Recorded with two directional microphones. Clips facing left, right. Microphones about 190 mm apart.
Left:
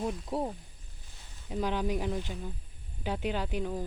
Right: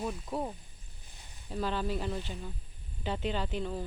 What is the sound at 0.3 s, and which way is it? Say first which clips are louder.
Speech: left 2 dB; 25° left (ahead or behind).